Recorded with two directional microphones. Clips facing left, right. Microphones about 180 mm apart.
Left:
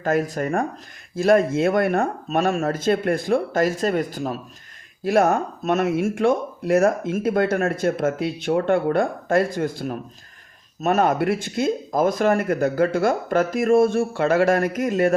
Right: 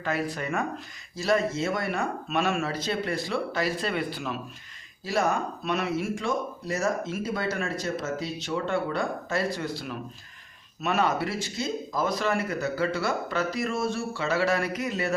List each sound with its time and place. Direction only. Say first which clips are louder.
0.0 s speech: left 8 dB; 45° left (ahead or behind)
5.0 s speech: left 8 dB; 55° left (ahead or behind)